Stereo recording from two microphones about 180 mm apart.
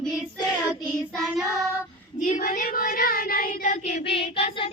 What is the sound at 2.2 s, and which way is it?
Child singing, 45° left (ahead or behind).